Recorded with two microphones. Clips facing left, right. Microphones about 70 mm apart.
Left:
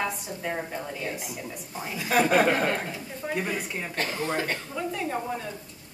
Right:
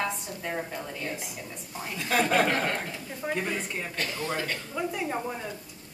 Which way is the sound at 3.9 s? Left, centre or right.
Left.